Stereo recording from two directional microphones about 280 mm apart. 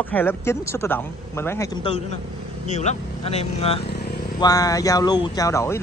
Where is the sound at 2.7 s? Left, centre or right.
Left.